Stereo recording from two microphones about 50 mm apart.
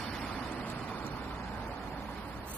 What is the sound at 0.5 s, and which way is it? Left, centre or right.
Vehicle, left.